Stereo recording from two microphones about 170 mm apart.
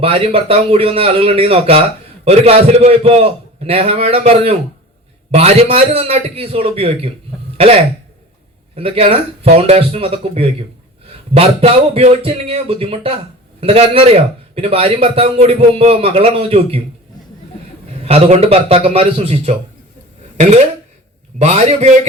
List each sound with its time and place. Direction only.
0.0 s a man's voice: 35° right (ahead or behind)
18.0 s a man's voice: 35° right (ahead or behind)